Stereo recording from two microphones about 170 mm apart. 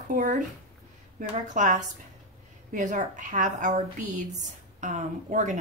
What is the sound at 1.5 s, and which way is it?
A woman's voice, 45° right (ahead or behind).